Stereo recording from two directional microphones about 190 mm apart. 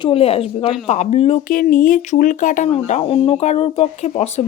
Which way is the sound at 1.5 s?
45° left (ahead or behind).